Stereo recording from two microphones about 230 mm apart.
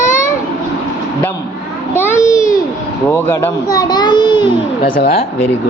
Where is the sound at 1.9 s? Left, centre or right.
Centre.